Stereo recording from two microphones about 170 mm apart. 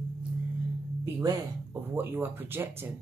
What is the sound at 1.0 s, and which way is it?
Speech, 15° right (ahead or behind).